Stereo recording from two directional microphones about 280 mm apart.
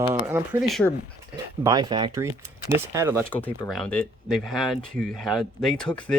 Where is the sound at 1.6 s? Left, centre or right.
Centre.